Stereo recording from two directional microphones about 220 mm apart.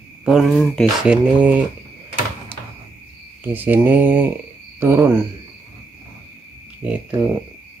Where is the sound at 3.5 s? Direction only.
10° right (ahead or behind).